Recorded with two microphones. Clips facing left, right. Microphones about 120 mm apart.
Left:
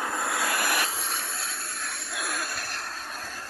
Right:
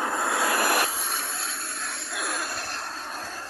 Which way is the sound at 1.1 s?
20° right (ahead or behind).